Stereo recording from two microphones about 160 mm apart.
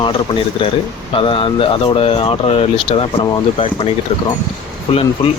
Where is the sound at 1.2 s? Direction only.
35° left (ahead or behind).